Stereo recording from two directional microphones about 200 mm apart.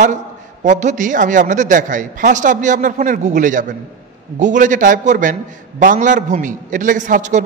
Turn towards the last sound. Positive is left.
turn(degrees=-40)  # may be behind; listen again after turning